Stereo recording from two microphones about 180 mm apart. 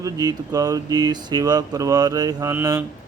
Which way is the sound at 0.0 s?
20° right (ahead or behind).